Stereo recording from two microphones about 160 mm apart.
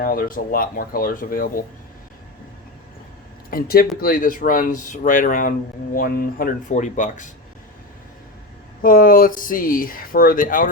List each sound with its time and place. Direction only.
0.0 s speech: 65° left (ahead or behind)
3.5 s speech: 65° left (ahead or behind); by 7.3 s 50° left (ahead or behind)
8.8 s speech: 60° left (ahead or behind)